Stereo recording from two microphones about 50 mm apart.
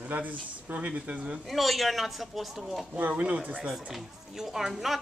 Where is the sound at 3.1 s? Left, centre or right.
Right.